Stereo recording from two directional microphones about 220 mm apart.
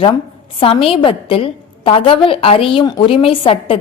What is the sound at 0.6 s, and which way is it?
A woman's voice, 25° left (ahead or behind).